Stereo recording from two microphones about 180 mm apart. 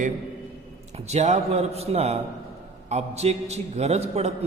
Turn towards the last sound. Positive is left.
turn(degrees=-35)  # may be behind; listen again after turning